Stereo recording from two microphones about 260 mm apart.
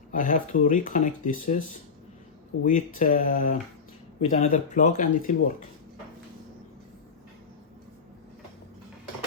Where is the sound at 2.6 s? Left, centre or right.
Left.